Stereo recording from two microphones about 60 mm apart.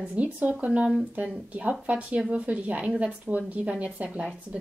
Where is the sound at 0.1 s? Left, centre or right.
Right.